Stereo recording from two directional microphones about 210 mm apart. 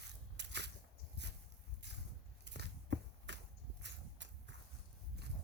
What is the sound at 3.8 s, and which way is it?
Horse, 55° right (ahead or behind).